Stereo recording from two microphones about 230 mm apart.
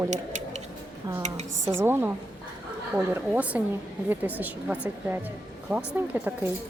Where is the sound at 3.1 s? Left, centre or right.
Centre.